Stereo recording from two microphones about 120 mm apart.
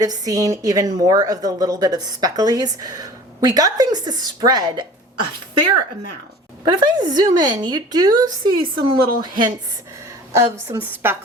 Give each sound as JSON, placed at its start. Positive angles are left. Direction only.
{"t": 0.0, "sound": "a woman's voice", "side_deg": -30}
{"t": 6.7, "sound": "a woman's voice", "side_deg": -35}
{"t": 10.3, "sound": "a woman's voice", "side_deg": -25}